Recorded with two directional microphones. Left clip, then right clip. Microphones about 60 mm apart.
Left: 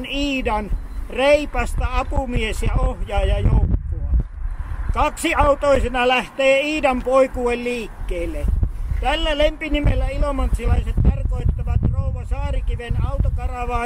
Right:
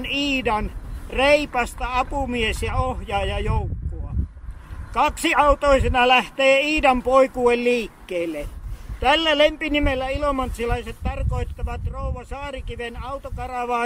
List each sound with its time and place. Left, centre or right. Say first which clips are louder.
0.2 s a man's voice: left 1 dB; centre
4.9 s a man's voice: even; centre